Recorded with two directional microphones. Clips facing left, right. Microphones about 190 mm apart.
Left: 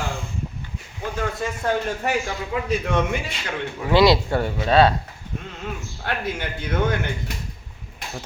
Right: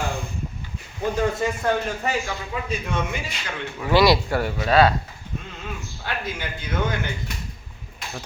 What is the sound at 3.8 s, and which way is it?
Speech, 20° left (ahead or behind).